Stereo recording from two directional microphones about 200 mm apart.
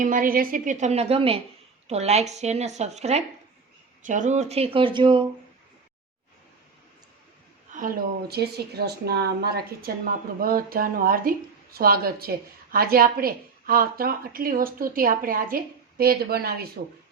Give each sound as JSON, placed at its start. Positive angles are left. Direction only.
{"t": 0.0, "sound": "a woman's voice", "side_deg": -45}
{"t": 8.3, "sound": "a woman's voice", "side_deg": -55}